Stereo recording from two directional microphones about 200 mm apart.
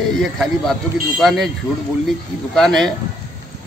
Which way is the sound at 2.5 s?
Centre (ahead or behind).